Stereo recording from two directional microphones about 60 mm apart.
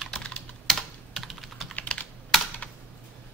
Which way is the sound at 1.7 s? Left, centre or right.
Left.